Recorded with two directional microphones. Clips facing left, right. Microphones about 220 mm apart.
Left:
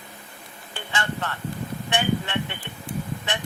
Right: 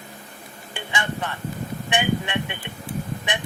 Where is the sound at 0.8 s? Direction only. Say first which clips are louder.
Right 1 dB; 15° right (ahead or behind).